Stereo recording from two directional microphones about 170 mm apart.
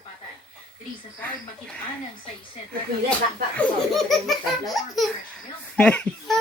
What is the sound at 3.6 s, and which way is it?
Laughter, centre (ahead or behind).